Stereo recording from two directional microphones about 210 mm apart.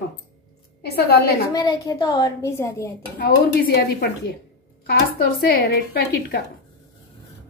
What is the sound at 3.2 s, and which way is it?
Speech, 50° left (ahead or behind).